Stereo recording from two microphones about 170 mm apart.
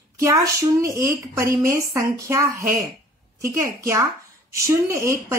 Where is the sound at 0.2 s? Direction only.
20° right (ahead or behind).